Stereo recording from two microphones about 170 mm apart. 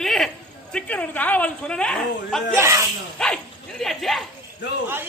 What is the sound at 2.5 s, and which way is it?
Speech, 15° right (ahead or behind).